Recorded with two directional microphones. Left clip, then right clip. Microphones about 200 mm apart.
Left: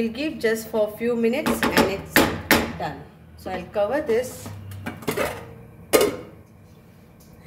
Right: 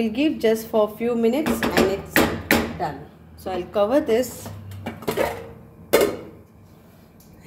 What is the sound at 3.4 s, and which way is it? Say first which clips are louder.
Speech: right 2 dB; 30° right (ahead or behind).